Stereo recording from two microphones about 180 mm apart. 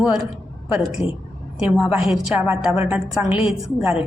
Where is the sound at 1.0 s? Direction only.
30° left (ahead or behind).